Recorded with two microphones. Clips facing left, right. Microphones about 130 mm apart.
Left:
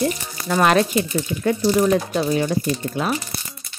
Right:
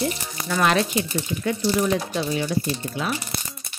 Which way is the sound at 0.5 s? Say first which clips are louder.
Left 4 dB; 45° left (ahead or behind).